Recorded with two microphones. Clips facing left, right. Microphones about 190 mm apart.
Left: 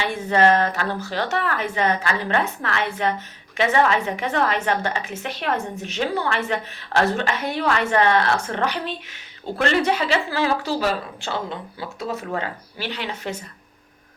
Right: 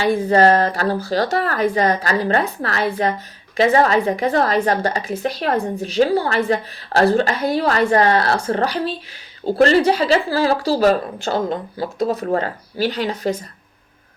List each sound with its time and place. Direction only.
0.0 s a woman's voice: 35° right (ahead or behind)